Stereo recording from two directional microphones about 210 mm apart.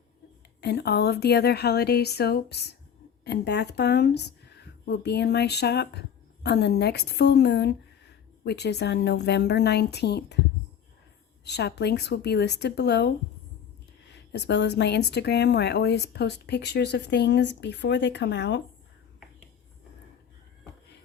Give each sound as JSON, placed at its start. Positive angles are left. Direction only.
{"t": 0.6, "sound": "speech", "side_deg": 50}
{"t": 11.4, "sound": "speech", "side_deg": 50}
{"t": 14.3, "sound": "speech", "side_deg": 55}